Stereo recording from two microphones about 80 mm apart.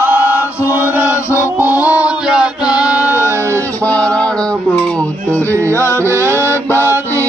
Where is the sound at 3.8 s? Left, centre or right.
Centre.